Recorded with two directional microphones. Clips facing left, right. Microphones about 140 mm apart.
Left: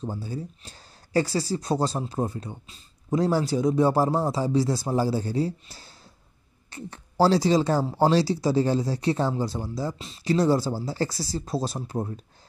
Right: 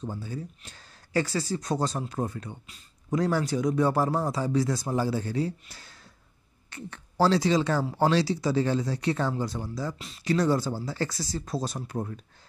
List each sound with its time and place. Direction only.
0.0 s speech: 35° left (ahead or behind)